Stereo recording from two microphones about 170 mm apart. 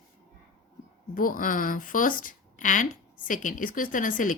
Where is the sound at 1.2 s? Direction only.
55° left (ahead or behind).